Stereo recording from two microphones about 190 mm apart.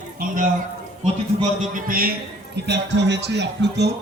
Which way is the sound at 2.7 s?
65° right (ahead or behind).